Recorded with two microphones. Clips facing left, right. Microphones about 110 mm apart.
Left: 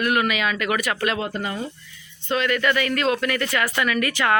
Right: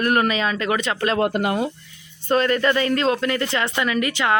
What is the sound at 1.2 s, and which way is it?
Speech, 60° right (ahead or behind).